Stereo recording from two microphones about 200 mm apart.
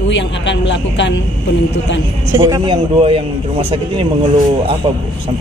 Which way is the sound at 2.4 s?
25° right (ahead or behind).